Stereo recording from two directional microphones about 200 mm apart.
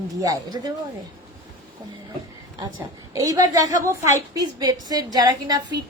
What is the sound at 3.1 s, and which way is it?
A woman's voice, 15° right (ahead or behind).